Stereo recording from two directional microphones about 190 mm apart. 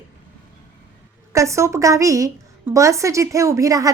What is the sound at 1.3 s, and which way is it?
A woman's voice, 15° right (ahead or behind).